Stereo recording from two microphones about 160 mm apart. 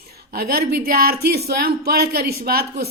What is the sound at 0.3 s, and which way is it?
A woman's voice, 70° right (ahead or behind).